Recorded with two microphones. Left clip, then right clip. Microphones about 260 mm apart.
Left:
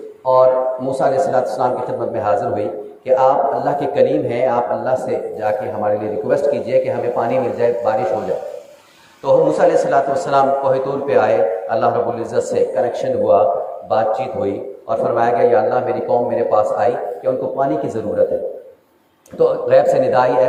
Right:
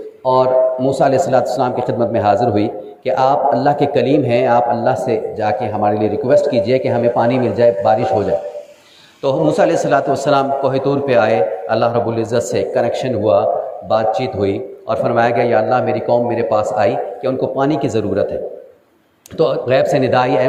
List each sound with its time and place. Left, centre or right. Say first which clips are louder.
0.3 s speech: even; right
9.2 s speech: left 1 dB; right
19.4 s speech: left 1 dB; right